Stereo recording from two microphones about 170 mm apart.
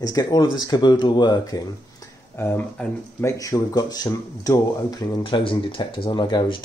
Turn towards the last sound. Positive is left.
turn(degrees=30)  # may be behind; listen again after turning